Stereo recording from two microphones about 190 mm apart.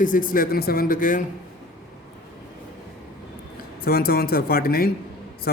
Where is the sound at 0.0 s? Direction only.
45° left (ahead or behind).